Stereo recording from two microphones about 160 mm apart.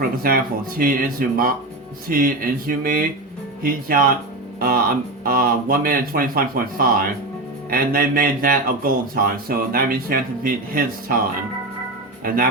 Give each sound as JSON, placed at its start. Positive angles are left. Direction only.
{"t": 0.0, "sound": "speech", "side_deg": -65}